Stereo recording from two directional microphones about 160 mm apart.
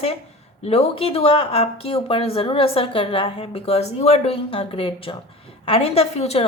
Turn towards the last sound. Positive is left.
turn(degrees=40)  # may be behind; listen again after turning